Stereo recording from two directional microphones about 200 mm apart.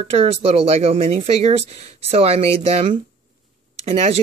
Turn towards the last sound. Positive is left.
turn(degrees=-35)  # may be behind; listen again after turning